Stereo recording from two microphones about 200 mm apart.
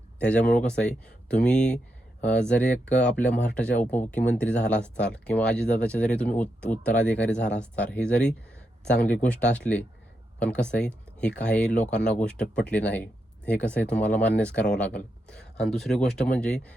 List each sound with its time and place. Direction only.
0.2 s speech: 5° left (ahead or behind)